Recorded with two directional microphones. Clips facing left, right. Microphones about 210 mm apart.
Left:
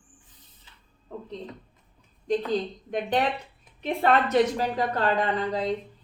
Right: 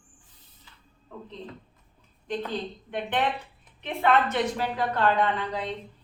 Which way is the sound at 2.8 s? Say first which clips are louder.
Left 1 dB; 40° left (ahead or behind).